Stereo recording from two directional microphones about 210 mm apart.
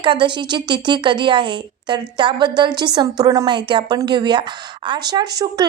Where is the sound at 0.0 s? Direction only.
25° right (ahead or behind).